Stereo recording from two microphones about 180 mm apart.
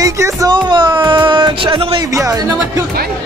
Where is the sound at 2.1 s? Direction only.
15° right (ahead or behind).